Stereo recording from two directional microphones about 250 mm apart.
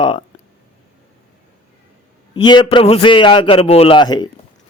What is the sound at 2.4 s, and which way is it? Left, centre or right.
A man's voice, centre.